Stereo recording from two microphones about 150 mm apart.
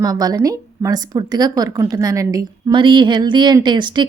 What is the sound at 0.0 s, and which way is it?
A woman's voice, 25° right (ahead or behind).